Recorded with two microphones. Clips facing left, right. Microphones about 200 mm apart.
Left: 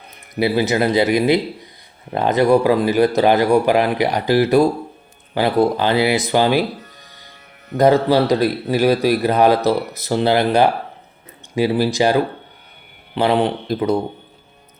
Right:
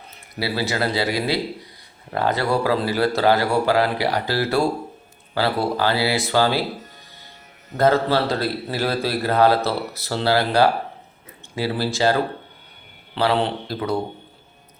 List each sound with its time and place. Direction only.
0.3 s speech: 20° left (ahead or behind)
7.8 s a man's voice: 15° left (ahead or behind)